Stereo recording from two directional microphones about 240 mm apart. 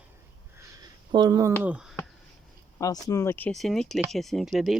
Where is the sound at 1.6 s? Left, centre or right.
Centre.